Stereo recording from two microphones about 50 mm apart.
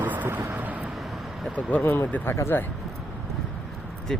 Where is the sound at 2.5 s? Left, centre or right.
Left.